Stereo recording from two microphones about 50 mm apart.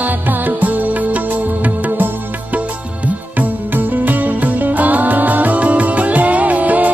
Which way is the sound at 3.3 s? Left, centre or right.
Right.